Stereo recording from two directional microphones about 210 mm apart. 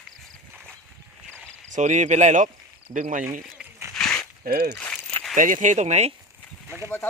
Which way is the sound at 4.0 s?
5° left (ahead or behind).